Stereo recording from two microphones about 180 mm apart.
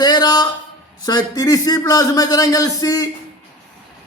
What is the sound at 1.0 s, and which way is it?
A man's voice, 20° left (ahead or behind).